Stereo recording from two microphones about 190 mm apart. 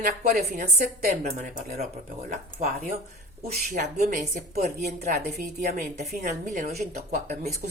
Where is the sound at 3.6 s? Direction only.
55° right (ahead or behind).